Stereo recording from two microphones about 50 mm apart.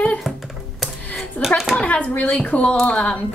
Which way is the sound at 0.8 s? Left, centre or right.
Centre.